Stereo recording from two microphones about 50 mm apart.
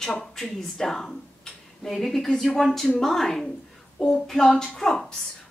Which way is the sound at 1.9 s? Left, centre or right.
Centre.